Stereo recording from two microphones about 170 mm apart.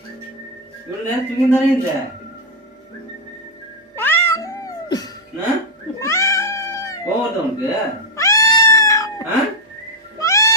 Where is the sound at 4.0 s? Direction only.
15° left (ahead or behind).